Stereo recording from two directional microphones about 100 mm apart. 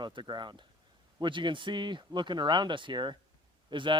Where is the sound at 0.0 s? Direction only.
50° right (ahead or behind).